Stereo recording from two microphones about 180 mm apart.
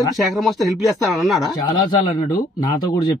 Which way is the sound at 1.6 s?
25° left (ahead or behind).